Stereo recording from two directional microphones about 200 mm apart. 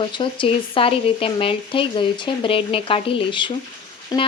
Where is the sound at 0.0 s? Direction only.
25° left (ahead or behind).